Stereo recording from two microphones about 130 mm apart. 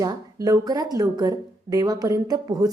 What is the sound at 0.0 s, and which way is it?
A woman's voice, 25° right (ahead or behind).